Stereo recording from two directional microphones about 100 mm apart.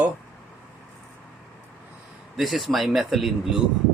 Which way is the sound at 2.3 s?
Centre (ahead or behind).